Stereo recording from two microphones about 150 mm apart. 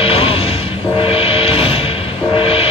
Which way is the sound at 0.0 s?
40° left (ahead or behind).